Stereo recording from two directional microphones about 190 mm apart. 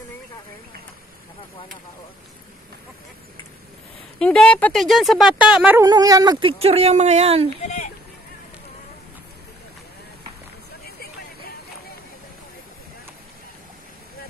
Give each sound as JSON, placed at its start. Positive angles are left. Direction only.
{"t": 4.2, "sound": "speech", "side_deg": 5}
{"t": 5.9, "sound": "speech", "side_deg": -20}
{"t": 7.6, "sound": "a sound", "side_deg": 40}